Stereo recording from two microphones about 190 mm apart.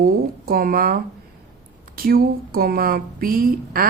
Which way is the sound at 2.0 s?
50° right (ahead or behind).